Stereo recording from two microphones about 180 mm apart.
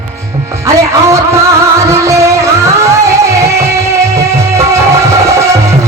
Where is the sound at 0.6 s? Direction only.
15° right (ahead or behind).